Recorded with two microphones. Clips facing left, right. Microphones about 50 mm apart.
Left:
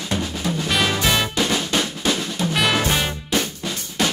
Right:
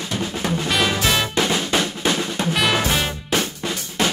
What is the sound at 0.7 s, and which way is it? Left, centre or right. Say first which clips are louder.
Music: even; centre.